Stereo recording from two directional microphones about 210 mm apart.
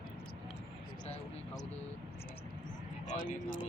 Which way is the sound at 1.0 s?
30° left (ahead or behind).